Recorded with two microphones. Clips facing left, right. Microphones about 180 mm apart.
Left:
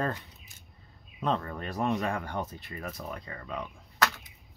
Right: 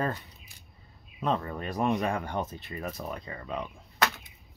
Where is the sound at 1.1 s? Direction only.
10° right (ahead or behind).